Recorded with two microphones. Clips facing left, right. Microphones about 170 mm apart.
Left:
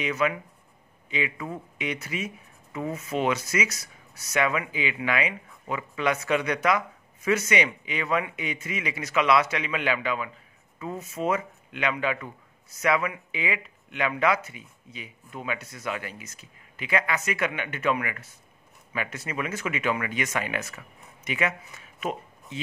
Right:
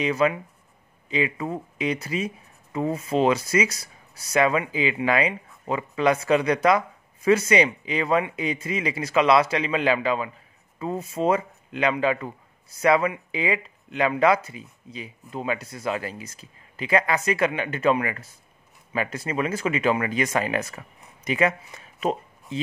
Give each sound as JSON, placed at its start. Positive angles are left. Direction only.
{"t": 0.0, "sound": "speech", "side_deg": -35}